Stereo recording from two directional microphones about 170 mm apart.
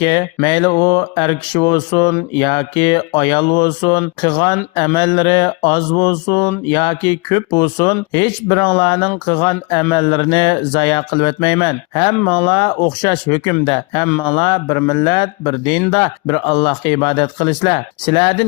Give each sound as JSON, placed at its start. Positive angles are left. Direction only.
{"t": 0.0, "sound": "speech", "side_deg": 25}